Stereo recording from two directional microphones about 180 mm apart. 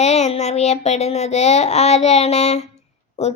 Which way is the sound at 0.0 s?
35° left (ahead or behind).